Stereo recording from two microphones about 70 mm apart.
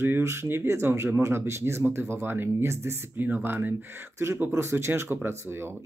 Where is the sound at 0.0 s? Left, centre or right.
Right.